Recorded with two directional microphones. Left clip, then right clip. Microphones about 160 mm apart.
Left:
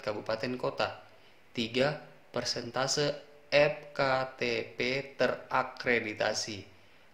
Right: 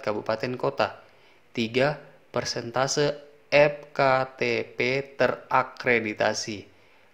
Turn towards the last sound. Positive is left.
turn(degrees=-55)  # may be behind; listen again after turning